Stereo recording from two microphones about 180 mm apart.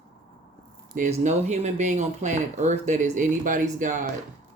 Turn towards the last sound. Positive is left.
turn(degrees=-45)  # may be behind; listen again after turning